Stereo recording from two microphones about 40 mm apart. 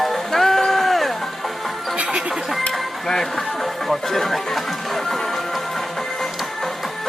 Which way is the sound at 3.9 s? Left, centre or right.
Centre.